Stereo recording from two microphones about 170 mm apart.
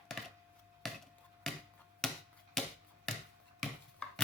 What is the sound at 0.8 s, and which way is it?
Chop, centre (ahead or behind).